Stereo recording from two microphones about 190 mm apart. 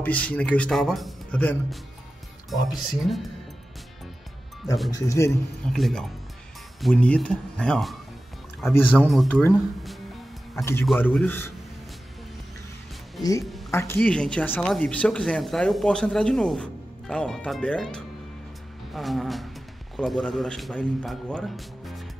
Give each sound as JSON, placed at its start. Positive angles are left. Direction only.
{"t": 0.0, "sound": "speech", "side_deg": 5}
{"t": 4.9, "sound": "speech", "side_deg": 15}
{"t": 5.7, "sound": "speech", "side_deg": 0}
{"t": 10.5, "sound": "speech", "side_deg": 15}
{"t": 13.4, "sound": "music", "side_deg": 0}
{"t": 13.7, "sound": "speech", "side_deg": 15}